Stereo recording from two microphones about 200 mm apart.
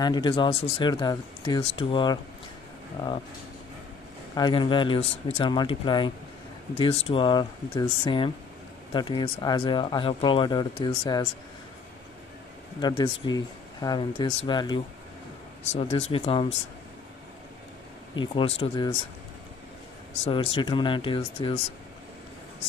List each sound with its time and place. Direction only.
0.0 s speech: 20° left (ahead or behind)
4.4 s speech: 25° left (ahead or behind)
12.8 s speech: 25° left (ahead or behind)
18.1 s speech: 25° left (ahead or behind)
20.2 s speech: 25° left (ahead or behind)